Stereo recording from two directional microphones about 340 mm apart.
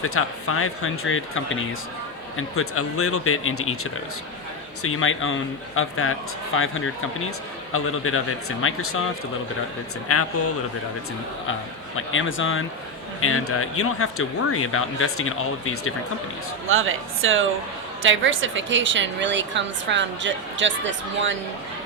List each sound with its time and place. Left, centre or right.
0.0 s speech: left
4.8 s speech: left
11.9 s speech: left
16.6 s speech: right